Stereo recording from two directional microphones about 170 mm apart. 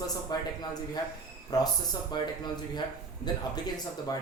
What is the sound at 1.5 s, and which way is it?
Speech, 20° left (ahead or behind).